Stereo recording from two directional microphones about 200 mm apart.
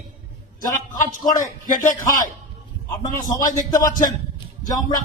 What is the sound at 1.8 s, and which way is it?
Speech, 40° left (ahead or behind).